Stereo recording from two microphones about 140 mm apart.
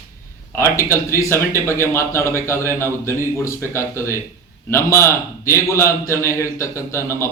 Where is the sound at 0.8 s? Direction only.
20° left (ahead or behind).